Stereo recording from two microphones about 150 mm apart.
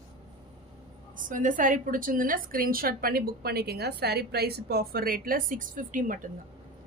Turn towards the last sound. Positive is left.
turn(degrees=-60)  # may be behind; listen again after turning